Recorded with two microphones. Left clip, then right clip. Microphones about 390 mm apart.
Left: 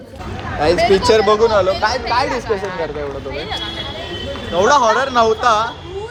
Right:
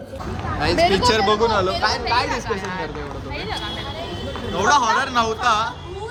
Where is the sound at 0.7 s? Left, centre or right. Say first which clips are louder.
Left 1 dB; centre.